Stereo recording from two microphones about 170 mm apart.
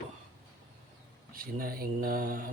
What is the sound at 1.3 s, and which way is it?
Speech, 60° right (ahead or behind).